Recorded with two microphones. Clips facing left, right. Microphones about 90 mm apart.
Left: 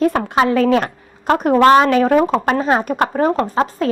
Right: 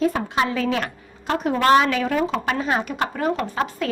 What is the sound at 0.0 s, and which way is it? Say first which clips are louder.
A woman's voice: left 6 dB; 60° left (ahead or behind).